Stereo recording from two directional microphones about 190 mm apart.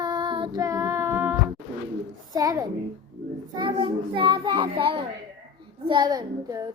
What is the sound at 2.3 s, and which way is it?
A child's voice, 20° right (ahead or behind).